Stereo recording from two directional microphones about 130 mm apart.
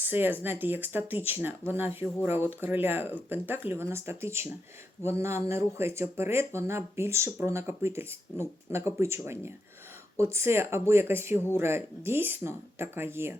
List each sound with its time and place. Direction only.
0.0 s speech: 15° right (ahead or behind)